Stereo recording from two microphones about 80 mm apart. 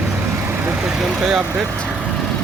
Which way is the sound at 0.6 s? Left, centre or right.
Right.